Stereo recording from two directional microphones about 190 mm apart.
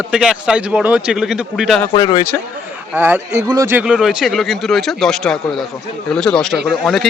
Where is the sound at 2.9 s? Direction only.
10° right (ahead or behind).